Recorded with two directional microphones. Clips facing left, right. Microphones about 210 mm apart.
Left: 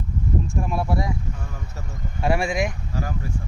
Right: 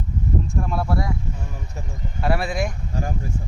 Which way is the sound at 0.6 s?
5° left (ahead or behind).